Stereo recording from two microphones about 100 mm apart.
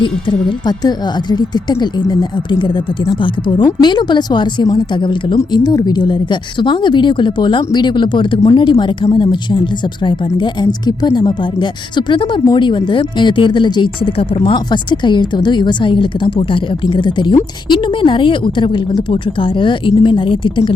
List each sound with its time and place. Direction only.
0.0 s a woman's voice: 50° left (ahead or behind)